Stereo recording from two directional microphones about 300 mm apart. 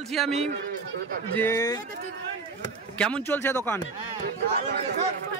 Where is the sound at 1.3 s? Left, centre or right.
Centre.